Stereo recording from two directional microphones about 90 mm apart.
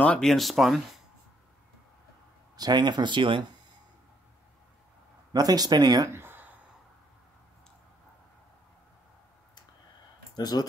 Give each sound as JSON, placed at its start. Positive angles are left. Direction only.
{"t": 0.0, "sound": "speech", "side_deg": 15}
{"t": 0.3, "sound": "speech", "side_deg": 0}
{"t": 2.5, "sound": "speech", "side_deg": -50}
{"t": 5.3, "sound": "speech", "side_deg": -45}
{"t": 6.0, "sound": "a sound", "side_deg": -25}
{"t": 10.3, "sound": "speech", "side_deg": 50}